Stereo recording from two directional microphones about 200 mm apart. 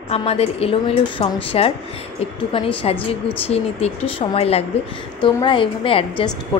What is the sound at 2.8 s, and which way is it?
A woman's voice, 30° left (ahead or behind).